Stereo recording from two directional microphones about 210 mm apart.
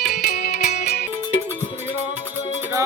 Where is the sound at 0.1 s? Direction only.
45° left (ahead or behind).